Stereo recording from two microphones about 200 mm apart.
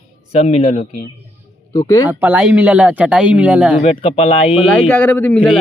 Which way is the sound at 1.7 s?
15° left (ahead or behind).